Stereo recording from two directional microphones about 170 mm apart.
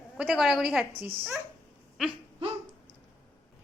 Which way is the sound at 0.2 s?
5° right (ahead or behind).